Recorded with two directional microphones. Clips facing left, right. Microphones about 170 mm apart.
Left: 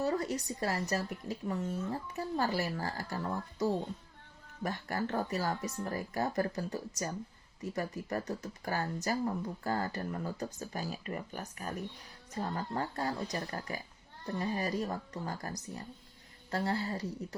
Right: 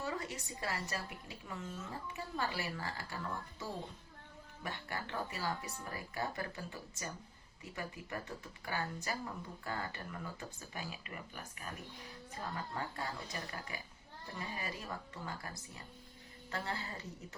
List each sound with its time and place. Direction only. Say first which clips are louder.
0.0 s speech: left 9 dB; 40° left (ahead or behind)
4.6 s speech: left 8 dB; 40° left (ahead or behind)